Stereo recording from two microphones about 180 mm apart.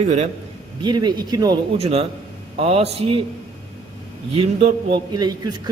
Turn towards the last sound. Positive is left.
turn(degrees=-25)  # may be behind; listen again after turning